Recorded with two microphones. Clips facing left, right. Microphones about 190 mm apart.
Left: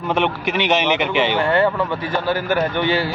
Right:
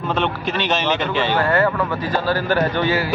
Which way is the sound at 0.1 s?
15° left (ahead or behind).